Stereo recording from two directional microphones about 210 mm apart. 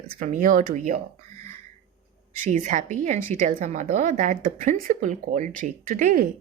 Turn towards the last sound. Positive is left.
turn(degrees=-40)  # may be behind; listen again after turning